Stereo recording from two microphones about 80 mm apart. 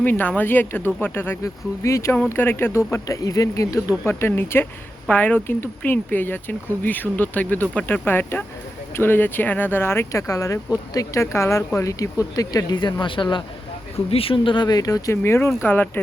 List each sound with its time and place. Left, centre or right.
0.0 s speech: left
1.8 s speech: left
4.2 s speech: left
12.7 s speech: left
15.1 s speech: left